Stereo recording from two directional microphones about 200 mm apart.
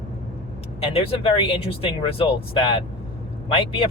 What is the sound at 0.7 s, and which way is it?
Speech, 30° left (ahead or behind).